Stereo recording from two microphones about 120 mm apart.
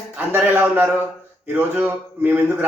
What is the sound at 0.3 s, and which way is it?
Speech, 15° right (ahead or behind).